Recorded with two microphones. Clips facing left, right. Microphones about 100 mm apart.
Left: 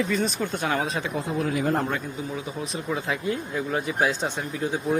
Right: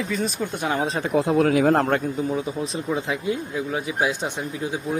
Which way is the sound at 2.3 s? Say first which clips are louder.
Right 5 dB; 35° right (ahead or behind).